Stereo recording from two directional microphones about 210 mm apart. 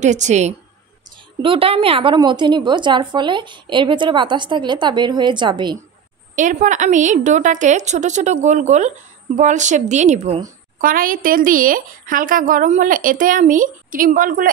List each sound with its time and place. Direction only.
0.0 s a woman's voice: 35° right (ahead or behind)
6.3 s a woman's voice: 35° right (ahead or behind)
10.8 s a woman's voice: 40° right (ahead or behind)